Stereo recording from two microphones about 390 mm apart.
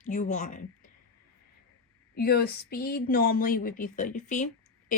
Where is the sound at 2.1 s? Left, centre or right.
Left.